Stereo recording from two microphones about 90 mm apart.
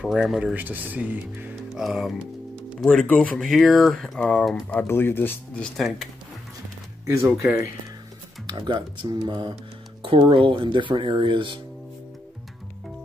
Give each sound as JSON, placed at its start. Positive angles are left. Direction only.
{"t": 0.0, "sound": "speech", "side_deg": 0}
{"t": 0.6, "sound": "speech", "side_deg": -20}
{"t": 1.7, "sound": "speech", "side_deg": -5}
{"t": 4.8, "sound": "speech", "side_deg": 25}
{"t": 5.6, "sound": "speech", "side_deg": 0}
{"t": 8.5, "sound": "speech", "side_deg": -60}
{"t": 10.0, "sound": "speech", "side_deg": -75}